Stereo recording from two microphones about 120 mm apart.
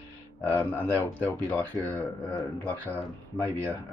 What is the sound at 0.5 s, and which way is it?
Speech, 15° left (ahead or behind).